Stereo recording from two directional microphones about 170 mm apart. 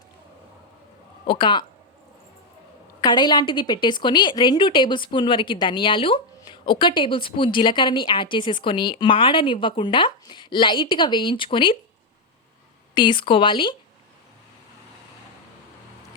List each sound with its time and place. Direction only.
1.3 s a woman's voice: 25° left (ahead or behind)
3.0 s a woman's voice: 25° left (ahead or behind)
12.9 s a woman's voice: 25° left (ahead or behind)